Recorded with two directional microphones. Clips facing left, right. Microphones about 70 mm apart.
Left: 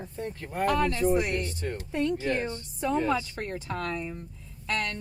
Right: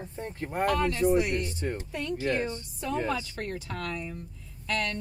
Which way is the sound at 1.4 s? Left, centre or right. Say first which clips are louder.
Right 1 dB; centre.